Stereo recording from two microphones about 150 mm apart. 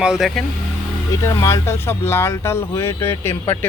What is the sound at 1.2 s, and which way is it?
Speech, 20° left (ahead or behind).